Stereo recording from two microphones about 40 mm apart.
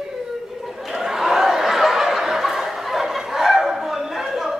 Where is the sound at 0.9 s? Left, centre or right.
Centre.